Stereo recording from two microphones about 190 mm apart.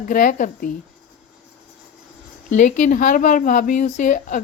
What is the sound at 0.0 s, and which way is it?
Speech, 45° left (ahead or behind).